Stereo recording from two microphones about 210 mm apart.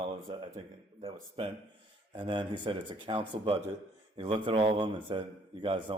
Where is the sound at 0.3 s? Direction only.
25° right (ahead or behind).